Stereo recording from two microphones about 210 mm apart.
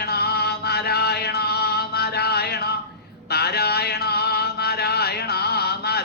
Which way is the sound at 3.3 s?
50° left (ahead or behind).